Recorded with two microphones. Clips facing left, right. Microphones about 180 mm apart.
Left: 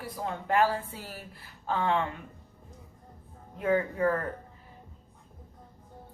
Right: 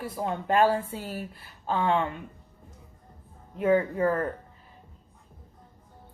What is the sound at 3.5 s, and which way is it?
Speech, 25° right (ahead or behind).